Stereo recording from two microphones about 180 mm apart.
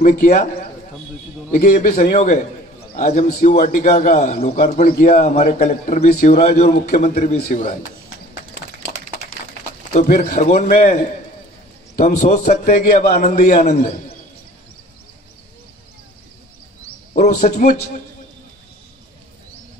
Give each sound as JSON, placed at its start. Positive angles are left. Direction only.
{"t": 0.0, "sound": "a man's voice", "side_deg": 45}
{"t": 7.2, "sound": "a man's voice", "side_deg": 55}
{"t": 9.9, "sound": "a man's voice", "side_deg": 45}
{"t": 17.5, "sound": "a man's voice", "side_deg": 45}